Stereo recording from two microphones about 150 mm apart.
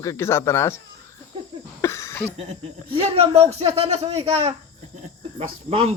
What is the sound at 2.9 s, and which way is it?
Speech, 40° right (ahead or behind).